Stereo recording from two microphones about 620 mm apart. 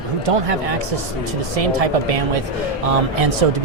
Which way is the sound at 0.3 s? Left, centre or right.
Right.